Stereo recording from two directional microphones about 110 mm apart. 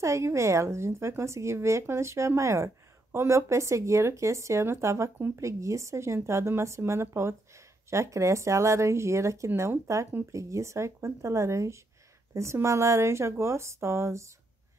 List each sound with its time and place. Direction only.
0.0 s speech: 25° right (ahead or behind)